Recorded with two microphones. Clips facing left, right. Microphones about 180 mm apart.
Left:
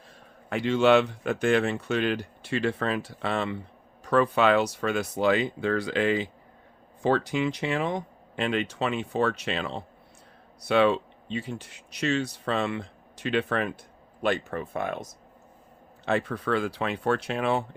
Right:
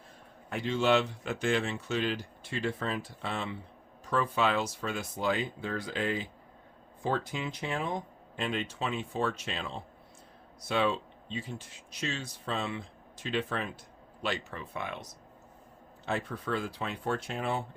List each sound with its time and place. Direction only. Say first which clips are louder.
0.5 s speech: left 6 dB; 75° left (ahead or behind)
14.2 s speech: left 8 dB; 55° left (ahead or behind)
16.0 s speech: left 7 dB; 75° left (ahead or behind)